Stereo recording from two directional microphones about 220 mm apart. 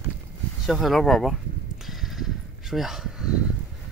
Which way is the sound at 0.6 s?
Centre (ahead or behind).